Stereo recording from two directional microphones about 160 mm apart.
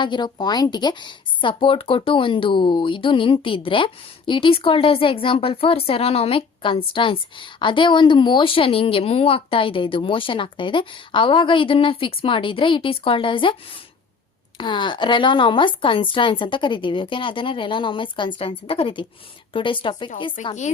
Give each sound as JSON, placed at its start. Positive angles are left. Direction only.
{"t": 0.0, "sound": "speech", "side_deg": 30}
{"t": 20.4, "sound": "speech", "side_deg": 50}